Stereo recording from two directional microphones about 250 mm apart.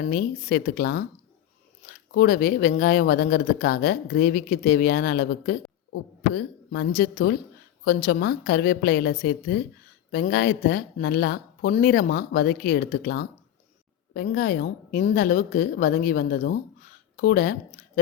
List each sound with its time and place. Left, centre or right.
0.1 s speech: left